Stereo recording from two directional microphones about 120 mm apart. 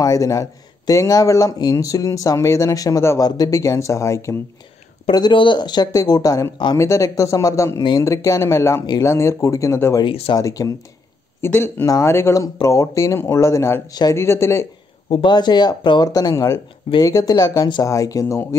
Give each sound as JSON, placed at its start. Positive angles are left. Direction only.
{"t": 0.0, "sound": "speech", "side_deg": 30}
{"t": 5.1, "sound": "speech", "side_deg": 40}
{"t": 10.0, "sound": "speech", "side_deg": 50}
{"t": 10.3, "sound": "speech", "side_deg": 30}
{"t": 11.4, "sound": "speech", "side_deg": 20}
{"t": 15.2, "sound": "speech", "side_deg": 40}